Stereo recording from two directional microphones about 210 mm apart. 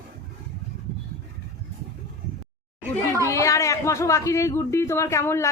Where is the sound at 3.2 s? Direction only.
15° left (ahead or behind).